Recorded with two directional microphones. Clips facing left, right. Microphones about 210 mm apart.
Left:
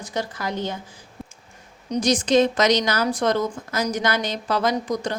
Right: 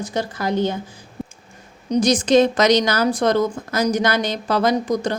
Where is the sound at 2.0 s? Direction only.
35° right (ahead or behind).